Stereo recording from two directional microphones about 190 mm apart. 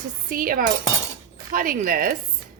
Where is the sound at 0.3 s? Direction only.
45° right (ahead or behind).